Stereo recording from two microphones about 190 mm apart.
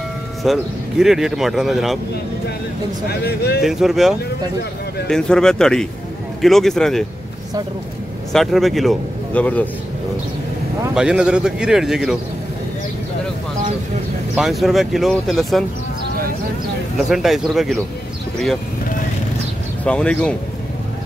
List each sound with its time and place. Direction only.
0.4 s speech: centre (ahead or behind)
3.1 s speech: 55° left (ahead or behind)
3.6 s speech: centre (ahead or behind)
8.3 s speech: centre (ahead or behind)
11.0 s speech: 5° right (ahead or behind)
14.3 s speech: centre (ahead or behind)
17.1 s speech: centre (ahead or behind)
19.8 s speech: 5° left (ahead or behind)